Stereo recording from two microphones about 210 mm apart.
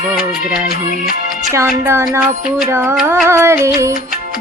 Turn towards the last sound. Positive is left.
turn(degrees=-15)  # may be behind; listen again after turning